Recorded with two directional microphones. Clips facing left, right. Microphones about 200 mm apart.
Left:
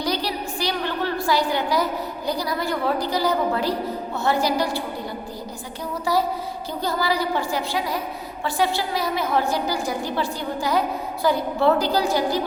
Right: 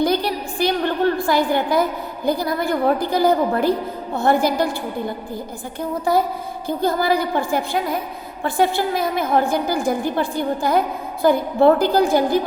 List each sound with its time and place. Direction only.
0.0 s a woman's voice: 55° right (ahead or behind)
6.1 s a woman's voice: 55° right (ahead or behind)